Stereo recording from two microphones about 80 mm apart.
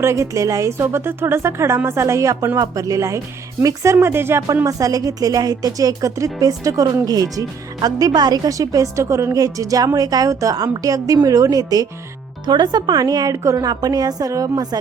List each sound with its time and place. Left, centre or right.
0.0 s a woman's voice: right
3.9 s a woman's voice: right
4.6 s speech: right
12.5 s speech: right